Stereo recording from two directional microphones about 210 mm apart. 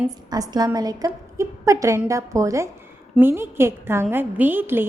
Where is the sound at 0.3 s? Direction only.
20° right (ahead or behind).